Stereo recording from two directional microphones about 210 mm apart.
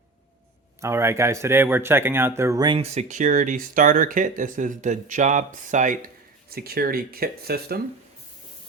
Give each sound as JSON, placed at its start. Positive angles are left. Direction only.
{"t": 0.8, "sound": "speech", "side_deg": -15}